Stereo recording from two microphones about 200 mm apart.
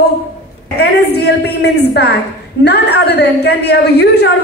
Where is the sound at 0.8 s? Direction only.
55° left (ahead or behind).